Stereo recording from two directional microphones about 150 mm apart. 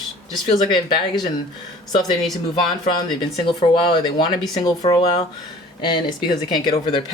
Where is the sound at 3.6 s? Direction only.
30° left (ahead or behind).